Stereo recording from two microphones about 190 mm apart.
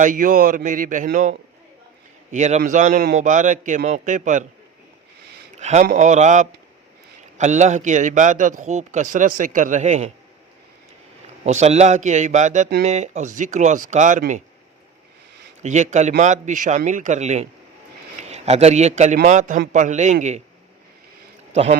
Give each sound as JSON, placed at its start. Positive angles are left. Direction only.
{"t": 0.0, "sound": "a man's voice", "side_deg": -45}
{"t": 5.5, "sound": "a man's voice", "side_deg": -35}
{"t": 11.4, "sound": "a man's voice", "side_deg": -35}
{"t": 15.6, "sound": "a man's voice", "side_deg": -40}
{"t": 21.5, "sound": "a man's voice", "side_deg": -35}